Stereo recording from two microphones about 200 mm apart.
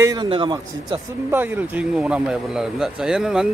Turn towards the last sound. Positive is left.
turn(degrees=-5)  # may be behind; listen again after turning